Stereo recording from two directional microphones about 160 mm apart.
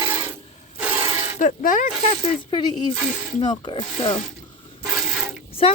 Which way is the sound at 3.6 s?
30° left (ahead or behind).